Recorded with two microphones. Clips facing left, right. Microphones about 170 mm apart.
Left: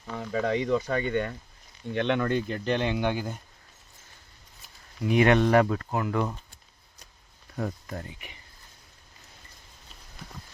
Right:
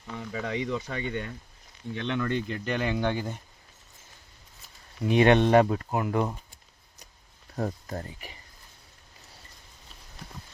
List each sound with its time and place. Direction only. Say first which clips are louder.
0.2 s speech: left 5 dB; 45° left (ahead or behind)
2.6 s speech: left 3 dB; 30° left (ahead or behind)
2.9 s speech: even; 10° left (ahead or behind)
5.0 s speech: right 1 dB; 25° right (ahead or behind)
7.5 s speech: right 1 dB; 35° right (ahead or behind)